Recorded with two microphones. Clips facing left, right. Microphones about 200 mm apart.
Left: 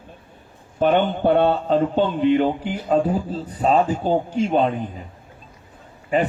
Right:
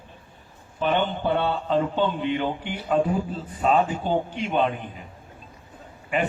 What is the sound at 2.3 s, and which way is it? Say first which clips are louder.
A man's voice: left 7 dB; 35° left (ahead or behind).